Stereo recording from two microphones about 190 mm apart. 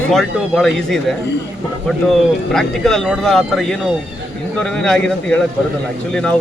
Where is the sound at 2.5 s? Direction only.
5° left (ahead or behind).